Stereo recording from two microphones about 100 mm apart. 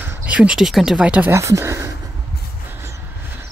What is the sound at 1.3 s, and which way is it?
Speech, 30° right (ahead or behind).